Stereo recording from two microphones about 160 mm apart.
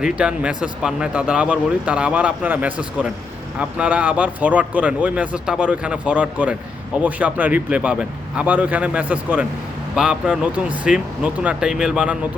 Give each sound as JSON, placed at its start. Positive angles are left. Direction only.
{"t": 0.0, "sound": "speech", "side_deg": -5}